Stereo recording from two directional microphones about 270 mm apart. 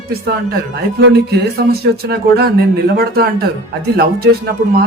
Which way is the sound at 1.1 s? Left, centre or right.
Right.